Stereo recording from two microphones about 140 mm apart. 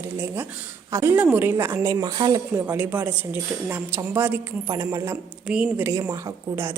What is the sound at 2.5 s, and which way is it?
A woman's voice, 15° right (ahead or behind).